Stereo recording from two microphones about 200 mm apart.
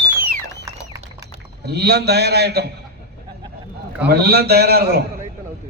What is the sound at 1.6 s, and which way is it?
A man's voice, 55° right (ahead or behind).